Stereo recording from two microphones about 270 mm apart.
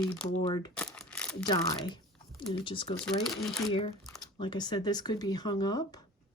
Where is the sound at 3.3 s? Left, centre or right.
Centre.